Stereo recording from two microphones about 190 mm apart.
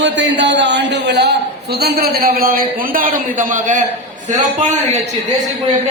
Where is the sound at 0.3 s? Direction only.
70° right (ahead or behind); by 4.9 s 40° right (ahead or behind).